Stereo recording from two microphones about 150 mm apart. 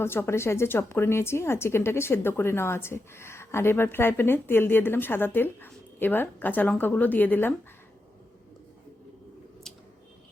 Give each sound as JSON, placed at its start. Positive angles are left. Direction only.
{"t": 0.0, "sound": "a woman's voice", "side_deg": 15}